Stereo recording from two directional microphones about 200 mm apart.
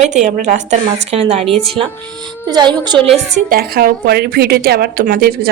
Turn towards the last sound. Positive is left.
turn(degrees=-45)  # may be behind; listen again after turning